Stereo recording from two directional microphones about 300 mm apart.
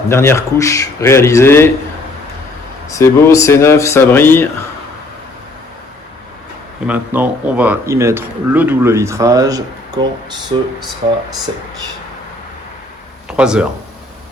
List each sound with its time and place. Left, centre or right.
0.1 s speech: centre
2.9 s speech: centre
6.8 s speech: centre
13.2 s speech: centre